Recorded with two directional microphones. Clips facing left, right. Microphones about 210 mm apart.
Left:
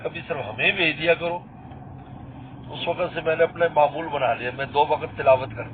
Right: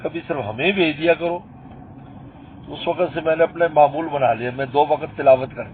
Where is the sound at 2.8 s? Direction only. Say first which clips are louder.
Right 5 dB; 45° right (ahead or behind).